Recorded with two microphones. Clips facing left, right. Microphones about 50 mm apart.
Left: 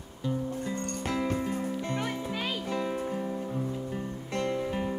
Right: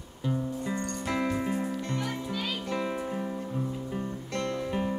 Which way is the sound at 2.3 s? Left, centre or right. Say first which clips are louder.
Even; left.